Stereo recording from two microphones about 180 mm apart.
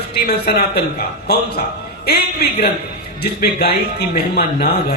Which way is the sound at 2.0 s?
60° left (ahead or behind).